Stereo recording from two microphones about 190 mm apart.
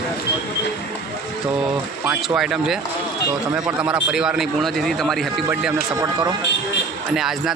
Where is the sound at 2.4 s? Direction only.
5° right (ahead or behind).